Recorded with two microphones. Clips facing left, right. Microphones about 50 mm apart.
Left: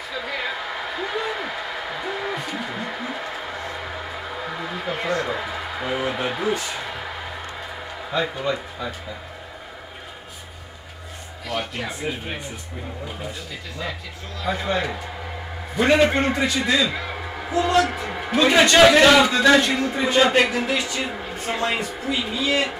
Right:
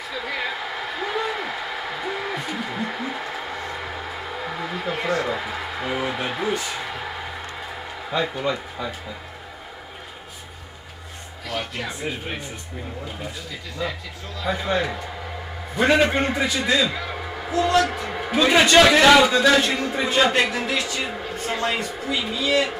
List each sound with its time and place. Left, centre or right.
0.1 s a sound: centre
8.2 s speech: centre
11.4 s speech: centre
14.4 s speech: centre
16.3 s a man's voice: centre
22.4 s speech: centre